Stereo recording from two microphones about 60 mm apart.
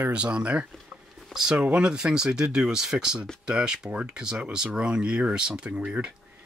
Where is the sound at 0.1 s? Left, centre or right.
Centre.